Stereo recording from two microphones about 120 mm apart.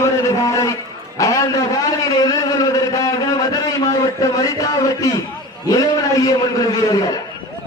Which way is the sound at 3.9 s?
30° left (ahead or behind).